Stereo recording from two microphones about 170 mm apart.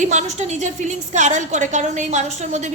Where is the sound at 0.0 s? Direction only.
40° right (ahead or behind).